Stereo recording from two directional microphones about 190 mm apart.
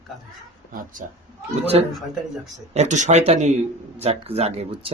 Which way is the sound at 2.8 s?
40° right (ahead or behind).